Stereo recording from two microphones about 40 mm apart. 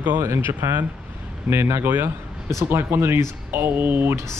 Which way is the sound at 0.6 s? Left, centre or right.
Right.